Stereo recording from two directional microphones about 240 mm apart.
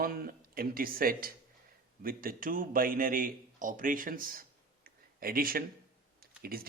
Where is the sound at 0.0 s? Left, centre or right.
Right.